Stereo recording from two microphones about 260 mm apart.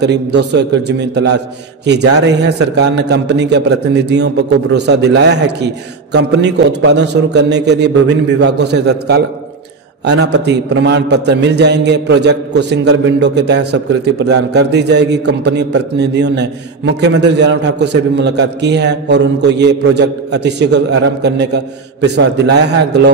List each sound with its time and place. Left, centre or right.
0.0 s a man's voice: right